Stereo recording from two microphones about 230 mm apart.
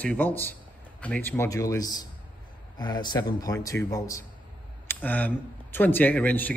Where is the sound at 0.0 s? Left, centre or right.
Centre.